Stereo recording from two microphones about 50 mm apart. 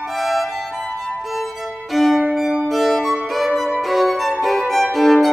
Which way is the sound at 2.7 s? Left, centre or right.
Centre.